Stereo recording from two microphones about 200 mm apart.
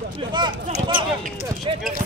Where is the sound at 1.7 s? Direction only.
25° right (ahead or behind).